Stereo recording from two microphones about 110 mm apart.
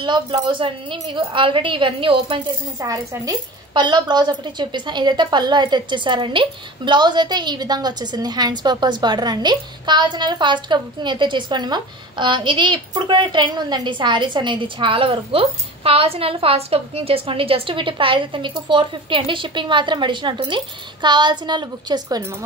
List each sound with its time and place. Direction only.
0.0 s a woman's voice: 45° right (ahead or behind)
2.8 s speech: 30° right (ahead or behind)
3.7 s a woman's voice: 45° right (ahead or behind)